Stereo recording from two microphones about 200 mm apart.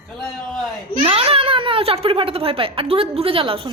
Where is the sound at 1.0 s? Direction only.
30° right (ahead or behind).